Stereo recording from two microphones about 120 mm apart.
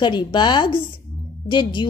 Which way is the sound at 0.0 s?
40° left (ahead or behind).